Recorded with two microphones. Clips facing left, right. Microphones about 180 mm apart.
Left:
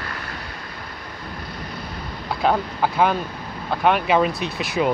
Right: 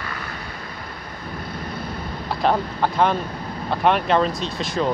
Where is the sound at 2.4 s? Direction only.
5° left (ahead or behind).